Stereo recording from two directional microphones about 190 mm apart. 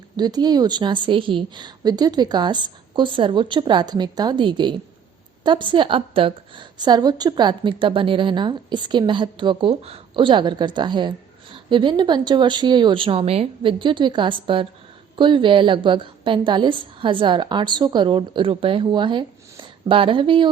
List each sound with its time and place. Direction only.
0.2 s a woman's voice: 20° right (ahead or behind)